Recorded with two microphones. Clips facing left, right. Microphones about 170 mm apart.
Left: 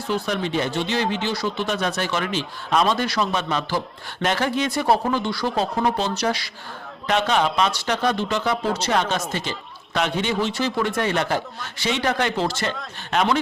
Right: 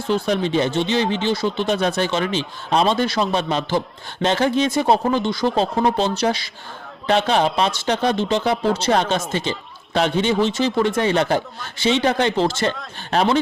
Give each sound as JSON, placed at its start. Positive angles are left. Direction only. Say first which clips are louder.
{"t": 0.3, "sound": "speech", "louder": "right 4 dB", "side_deg": -25}